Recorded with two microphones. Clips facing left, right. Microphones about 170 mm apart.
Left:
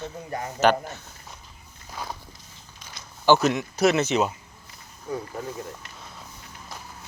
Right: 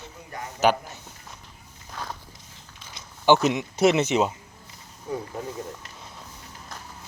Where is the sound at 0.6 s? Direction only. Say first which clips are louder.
Left 1 dB; 10° right (ahead or behind).